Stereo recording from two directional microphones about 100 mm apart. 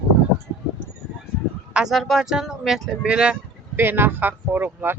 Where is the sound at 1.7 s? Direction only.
10° right (ahead or behind).